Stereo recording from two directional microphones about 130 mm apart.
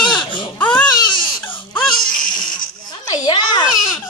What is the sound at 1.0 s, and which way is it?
Baby cry, 40° left (ahead or behind).